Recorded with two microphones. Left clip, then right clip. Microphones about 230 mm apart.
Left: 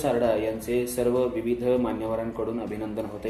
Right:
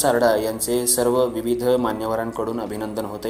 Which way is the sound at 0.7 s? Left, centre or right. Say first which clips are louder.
Right 5 dB; right.